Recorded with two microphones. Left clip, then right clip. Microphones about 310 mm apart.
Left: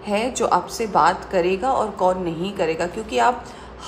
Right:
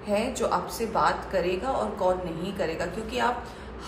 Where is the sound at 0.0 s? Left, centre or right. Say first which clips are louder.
Left 5 dB; left.